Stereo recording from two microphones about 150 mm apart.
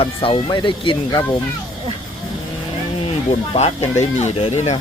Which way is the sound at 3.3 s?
45° left (ahead or behind).